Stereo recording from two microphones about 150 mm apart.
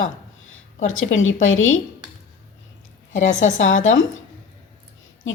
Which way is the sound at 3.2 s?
55° left (ahead or behind).